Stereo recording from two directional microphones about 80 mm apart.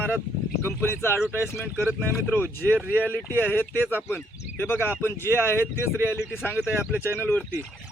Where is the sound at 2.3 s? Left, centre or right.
Left.